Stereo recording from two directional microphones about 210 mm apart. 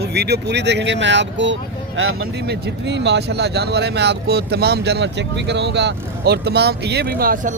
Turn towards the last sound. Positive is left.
turn(degrees=-45)  # may be behind; listen again after turning